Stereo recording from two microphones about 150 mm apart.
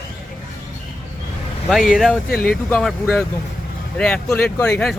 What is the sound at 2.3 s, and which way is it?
Speech, 80° left.